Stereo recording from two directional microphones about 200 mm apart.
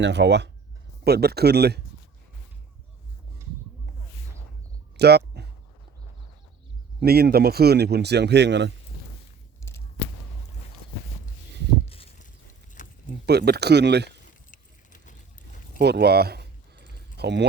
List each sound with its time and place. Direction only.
0.0 s speech: 60° right (ahead or behind)
4.9 s a sound: 55° right (ahead or behind)
7.0 s speech: 50° right (ahead or behind)
11.9 s a sound: 30° left (ahead or behind)
12.8 s keys jangling: 40° left (ahead or behind)
13.2 s speech: 55° right (ahead or behind)
14.5 s keys jangling: 40° left (ahead or behind)
15.8 s a sound: 55° right (ahead or behind)
17.2 s speech: 55° right (ahead or behind)